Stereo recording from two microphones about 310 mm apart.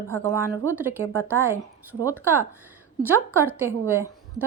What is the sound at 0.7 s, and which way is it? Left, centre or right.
A woman's voice, centre.